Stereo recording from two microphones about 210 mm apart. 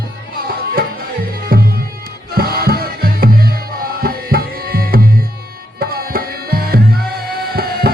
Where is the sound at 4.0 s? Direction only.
45° right (ahead or behind).